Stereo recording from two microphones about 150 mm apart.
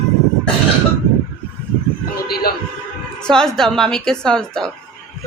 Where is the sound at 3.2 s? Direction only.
5° left (ahead or behind).